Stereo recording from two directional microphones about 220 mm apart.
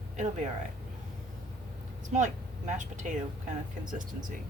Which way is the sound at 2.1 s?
35° right (ahead or behind).